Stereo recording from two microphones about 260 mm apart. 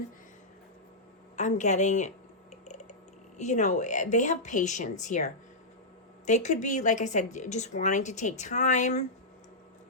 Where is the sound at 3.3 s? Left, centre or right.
Left.